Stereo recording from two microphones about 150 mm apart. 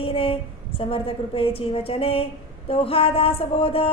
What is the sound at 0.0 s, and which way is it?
A woman's voice, 40° left (ahead or behind).